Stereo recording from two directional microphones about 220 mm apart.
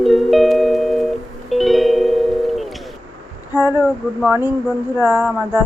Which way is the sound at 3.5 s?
10° right (ahead or behind).